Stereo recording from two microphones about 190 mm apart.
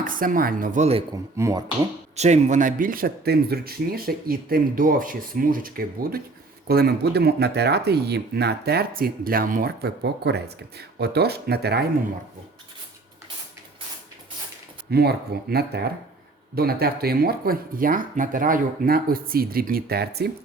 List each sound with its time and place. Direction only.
0.0 s speech: 45° right (ahead or behind)
1.4 s speech: 15° right (ahead or behind)
2.1 s speech: 35° right (ahead or behind); by 11.9 s 55° right (ahead or behind)
14.8 s speech: 55° right (ahead or behind)